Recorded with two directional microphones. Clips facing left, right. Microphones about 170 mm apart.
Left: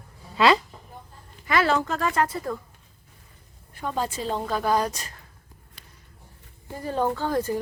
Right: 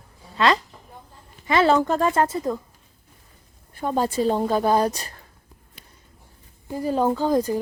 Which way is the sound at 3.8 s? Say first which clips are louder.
Right 6 dB; 35° right (ahead or behind).